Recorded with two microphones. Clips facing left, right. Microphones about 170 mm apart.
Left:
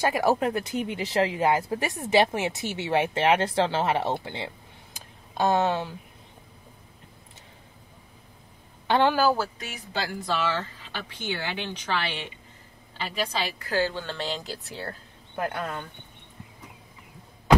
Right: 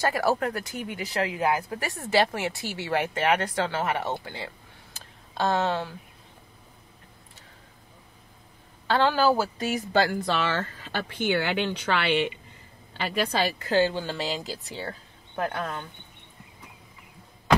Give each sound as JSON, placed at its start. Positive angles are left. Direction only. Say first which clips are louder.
{"t": 0.0, "sound": "speech", "louder": "left 2 dB", "side_deg": 15}
{"t": 4.9, "sound": "a sound", "louder": "left 2 dB", "side_deg": 15}
{"t": 8.8, "sound": "a woman's voice", "louder": "left 1 dB", "side_deg": 15}
{"t": 9.6, "sound": "speech", "louder": "right 9 dB", "side_deg": -40}
{"t": 10.2, "sound": "speech", "louder": "right 1 dB", "side_deg": -65}
{"t": 13.6, "sound": "speech", "louder": "right 3 dB", "side_deg": -25}